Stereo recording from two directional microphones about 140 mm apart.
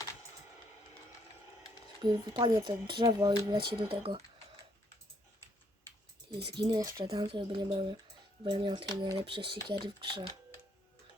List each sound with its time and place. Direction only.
2.0 s speech: 30° right (ahead or behind)
3.0 s speech: 40° right (ahead or behind)
6.3 s speech: 35° right (ahead or behind)